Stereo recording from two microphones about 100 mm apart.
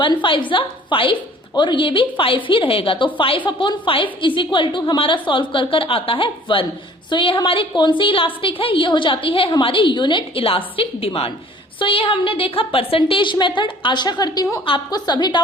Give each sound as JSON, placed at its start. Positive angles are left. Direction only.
{"t": 0.0, "sound": "a woman's voice", "side_deg": 55}